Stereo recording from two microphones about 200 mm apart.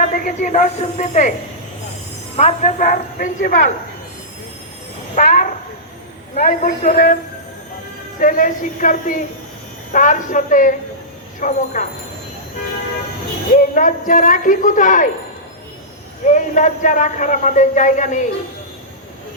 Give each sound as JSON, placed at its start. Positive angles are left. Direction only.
{"t": 0.0, "sound": "a man's voice", "side_deg": 40}
{"t": 2.3, "sound": "a man's voice", "side_deg": 35}
{"t": 5.1, "sound": "a man's voice", "side_deg": 40}
{"t": 8.2, "sound": "a man's voice", "side_deg": 40}
{"t": 13.5, "sound": "a man's voice", "side_deg": 40}
{"t": 16.3, "sound": "a man's voice", "side_deg": 40}